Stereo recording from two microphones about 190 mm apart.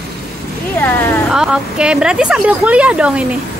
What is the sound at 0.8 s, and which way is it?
Speech, 10° left (ahead or behind).